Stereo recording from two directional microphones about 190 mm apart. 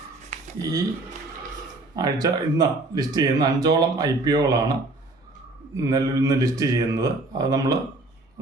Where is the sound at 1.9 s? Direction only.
20° right (ahead or behind).